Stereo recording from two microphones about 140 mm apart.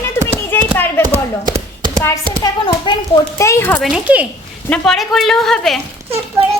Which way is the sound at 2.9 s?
35° left (ahead or behind).